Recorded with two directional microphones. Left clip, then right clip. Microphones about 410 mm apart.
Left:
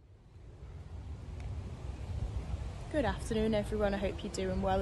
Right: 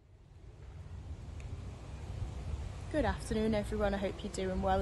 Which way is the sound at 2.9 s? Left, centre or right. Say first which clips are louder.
Left 1 dB; centre.